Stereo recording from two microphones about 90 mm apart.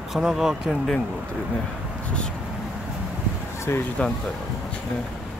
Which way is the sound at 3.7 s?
30° left (ahead or behind).